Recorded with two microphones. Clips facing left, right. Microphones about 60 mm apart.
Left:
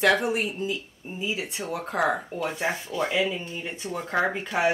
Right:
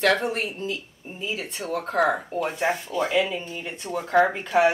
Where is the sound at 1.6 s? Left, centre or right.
Left.